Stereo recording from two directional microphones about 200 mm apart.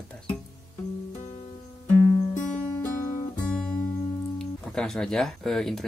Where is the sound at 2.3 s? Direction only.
40° left (ahead or behind).